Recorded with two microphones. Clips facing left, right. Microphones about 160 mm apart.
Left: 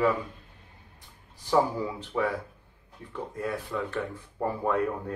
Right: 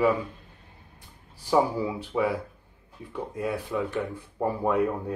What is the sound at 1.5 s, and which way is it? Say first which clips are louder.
Speech: right 2 dB; 10° right (ahead or behind).